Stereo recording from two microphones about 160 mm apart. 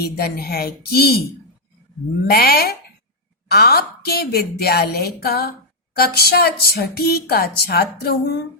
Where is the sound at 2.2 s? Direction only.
75° left (ahead or behind).